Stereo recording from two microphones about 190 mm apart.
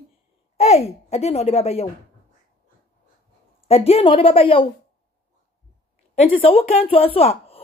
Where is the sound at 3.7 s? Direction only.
30° left (ahead or behind).